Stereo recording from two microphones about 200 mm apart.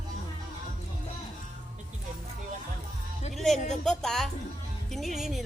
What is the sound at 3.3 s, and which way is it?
Speech, centre (ahead or behind).